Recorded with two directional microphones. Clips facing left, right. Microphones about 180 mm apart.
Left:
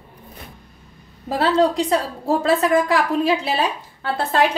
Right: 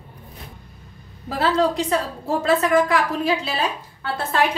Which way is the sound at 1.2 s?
30° left (ahead or behind).